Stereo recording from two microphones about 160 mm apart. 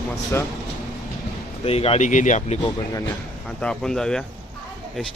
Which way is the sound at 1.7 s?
40° left (ahead or behind).